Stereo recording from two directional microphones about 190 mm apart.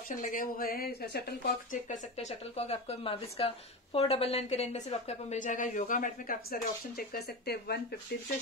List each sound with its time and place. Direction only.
0.1 s speech: 45° left (ahead or behind)
1.9 s speech: 35° left (ahead or behind); by 7.8 s 55° left (ahead or behind)